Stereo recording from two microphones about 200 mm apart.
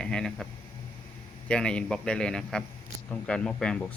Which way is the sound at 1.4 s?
5° left (ahead or behind).